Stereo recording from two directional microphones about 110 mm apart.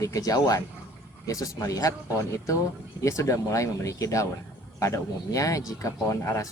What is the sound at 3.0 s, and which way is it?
Speech, 30° left (ahead or behind).